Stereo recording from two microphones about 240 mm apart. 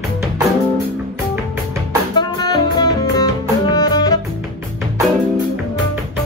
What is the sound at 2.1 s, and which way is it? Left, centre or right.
Music, centre.